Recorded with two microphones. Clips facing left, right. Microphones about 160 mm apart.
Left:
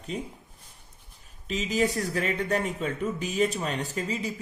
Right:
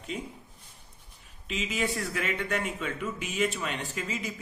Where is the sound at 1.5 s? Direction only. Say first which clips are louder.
Left 5 dB; 40° left (ahead or behind).